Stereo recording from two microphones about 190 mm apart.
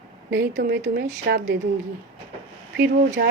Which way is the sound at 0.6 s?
65° right (ahead or behind).